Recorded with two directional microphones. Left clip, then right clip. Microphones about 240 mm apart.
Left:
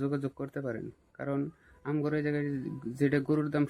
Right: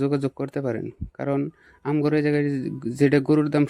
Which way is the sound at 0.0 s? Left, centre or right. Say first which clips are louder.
Right 9 dB; right.